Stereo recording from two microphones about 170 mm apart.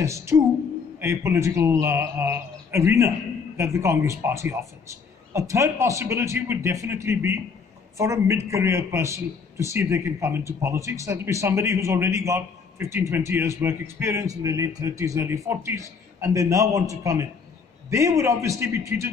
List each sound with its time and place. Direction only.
0.0 s a man's voice: 15° right (ahead or behind)